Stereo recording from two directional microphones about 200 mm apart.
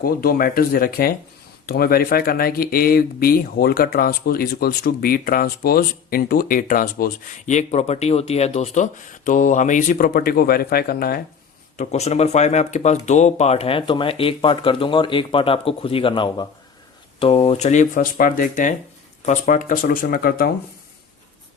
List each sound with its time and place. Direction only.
0.0 s speech: 50° left (ahead or behind)
11.8 s speech: 35° left (ahead or behind)